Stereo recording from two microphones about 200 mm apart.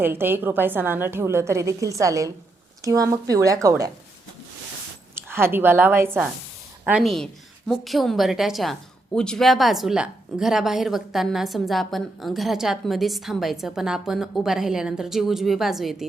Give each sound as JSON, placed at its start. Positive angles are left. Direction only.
{"t": 0.0, "sound": "a woman's voice", "side_deg": -10}
{"t": 5.1, "sound": "a woman's voice", "side_deg": -10}